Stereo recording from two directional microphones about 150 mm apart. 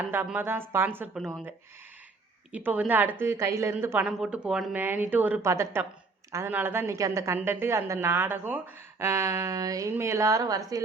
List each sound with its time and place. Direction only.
0.0 s a woman's voice: 10° right (ahead or behind)
2.5 s a woman's voice: 10° right (ahead or behind)